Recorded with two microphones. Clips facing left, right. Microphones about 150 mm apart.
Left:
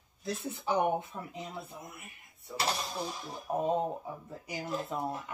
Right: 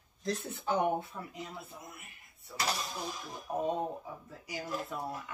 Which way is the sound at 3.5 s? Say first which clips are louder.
Left 3 dB; 20° left (ahead or behind).